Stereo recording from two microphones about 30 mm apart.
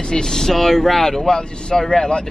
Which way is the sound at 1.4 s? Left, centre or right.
Left.